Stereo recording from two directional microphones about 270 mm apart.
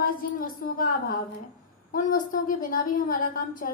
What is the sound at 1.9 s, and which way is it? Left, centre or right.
A woman's voice, left.